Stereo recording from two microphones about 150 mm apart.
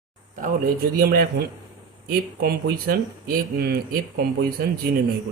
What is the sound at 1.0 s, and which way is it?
A man's voice, 85° right.